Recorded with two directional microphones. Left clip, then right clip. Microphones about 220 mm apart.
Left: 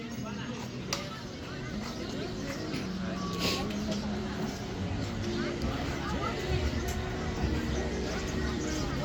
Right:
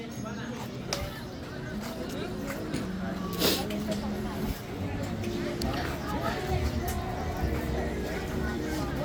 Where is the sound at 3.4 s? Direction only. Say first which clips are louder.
Right 5 dB; 30° right (ahead or behind).